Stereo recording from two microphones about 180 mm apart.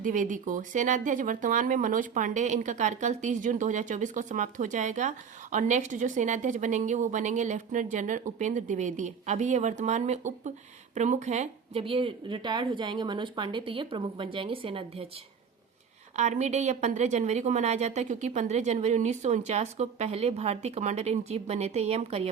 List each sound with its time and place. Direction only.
0.0 s speech: 45° right (ahead or behind); by 15.0 s 30° right (ahead or behind)
16.1 s speech: 40° right (ahead or behind)